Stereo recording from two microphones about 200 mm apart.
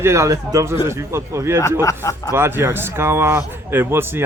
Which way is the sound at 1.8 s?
15° left (ahead or behind).